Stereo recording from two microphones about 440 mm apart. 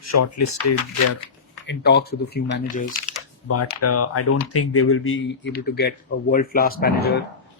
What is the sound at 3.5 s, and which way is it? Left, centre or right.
Speech, left.